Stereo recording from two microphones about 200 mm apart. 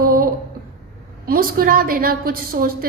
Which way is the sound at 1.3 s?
45° right (ahead or behind).